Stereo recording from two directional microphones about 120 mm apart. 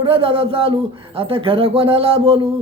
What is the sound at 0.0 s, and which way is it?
A man's voice, 50° right (ahead or behind).